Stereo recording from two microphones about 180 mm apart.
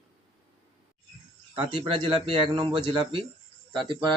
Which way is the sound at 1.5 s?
30° right (ahead or behind).